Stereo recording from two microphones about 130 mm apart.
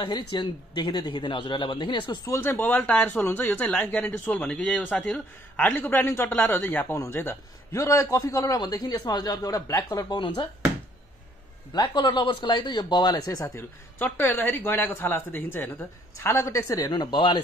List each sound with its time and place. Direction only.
0.0 s speech: 40° left (ahead or behind)
2.2 s speech: 20° left (ahead or behind)
5.7 s speech: 20° left (ahead or behind); by 10.4 s 35° left (ahead or behind)
11.7 s speech: 35° left (ahead or behind)
13.9 s speech: 15° left (ahead or behind); by 17.4 s 35° left (ahead or behind)